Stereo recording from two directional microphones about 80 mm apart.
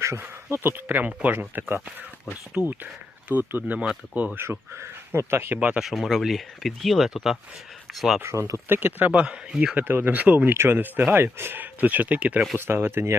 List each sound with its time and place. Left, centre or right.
0.0 s speech: right
0.5 s speech: right
4.4 s speech: right
5.5 s speech: centre
5.9 s speech: centre
8.2 s speech: right; by 9.7 s centre
9.7 s speech: right
12.5 s speech: right